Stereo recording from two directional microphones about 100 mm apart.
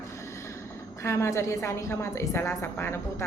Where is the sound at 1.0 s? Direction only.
30° left (ahead or behind).